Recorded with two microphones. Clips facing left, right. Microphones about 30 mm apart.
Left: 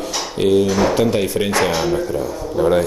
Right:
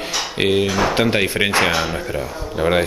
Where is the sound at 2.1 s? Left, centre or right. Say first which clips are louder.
Left 3 dB; right.